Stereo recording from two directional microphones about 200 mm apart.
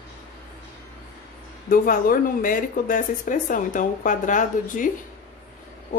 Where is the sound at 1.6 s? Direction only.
45° left (ahead or behind).